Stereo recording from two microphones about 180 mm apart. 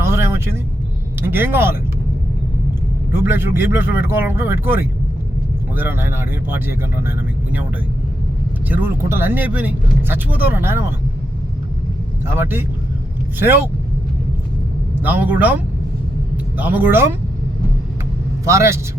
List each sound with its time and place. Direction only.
0.0 s vehicle: 15° right (ahead or behind)
1.2 s speech: 10° right (ahead or behind)
3.1 s speech: 10° right (ahead or behind)
8.7 s speech: 10° right (ahead or behind)
12.2 s speech: 10° right (ahead or behind)
15.0 s speech: 10° right (ahead or behind)
16.6 s speech: 10° right (ahead or behind)
18.4 s speech: 15° right (ahead or behind)